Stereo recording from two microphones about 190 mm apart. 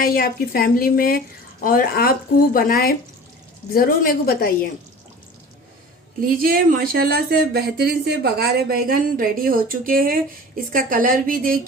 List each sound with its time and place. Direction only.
0.0 s speech: 50° left (ahead or behind)
6.2 s speech: 50° right (ahead or behind)